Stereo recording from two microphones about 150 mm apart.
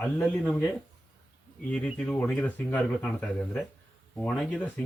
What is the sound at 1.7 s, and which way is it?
Speech, 10° left (ahead or behind).